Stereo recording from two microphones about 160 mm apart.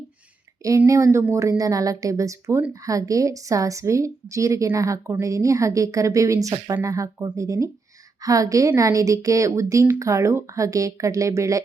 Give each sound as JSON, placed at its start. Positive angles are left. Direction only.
{"t": 0.9, "sound": "a woman's voice", "side_deg": -20}